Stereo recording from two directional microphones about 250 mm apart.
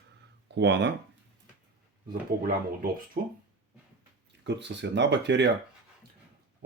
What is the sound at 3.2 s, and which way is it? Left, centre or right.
Speech, right.